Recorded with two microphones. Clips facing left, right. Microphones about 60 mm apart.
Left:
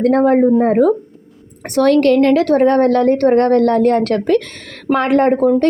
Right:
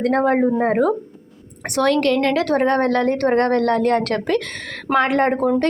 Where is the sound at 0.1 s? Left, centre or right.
Right.